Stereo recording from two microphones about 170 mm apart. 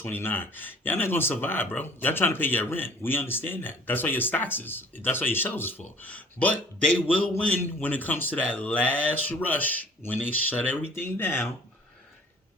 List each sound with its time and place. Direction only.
0.0 s speech: 10° left (ahead or behind)